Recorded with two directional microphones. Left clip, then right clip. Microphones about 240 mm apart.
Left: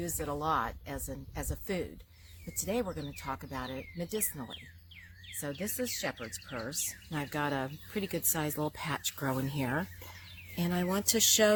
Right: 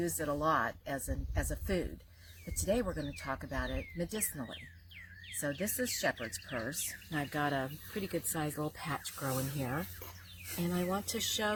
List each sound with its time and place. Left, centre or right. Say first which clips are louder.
0.0 s speech: right 2 dB; centre
7.1 s speech: even; left